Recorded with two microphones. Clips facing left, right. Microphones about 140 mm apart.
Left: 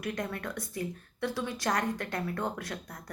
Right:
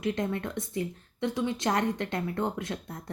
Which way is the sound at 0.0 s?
25° right (ahead or behind).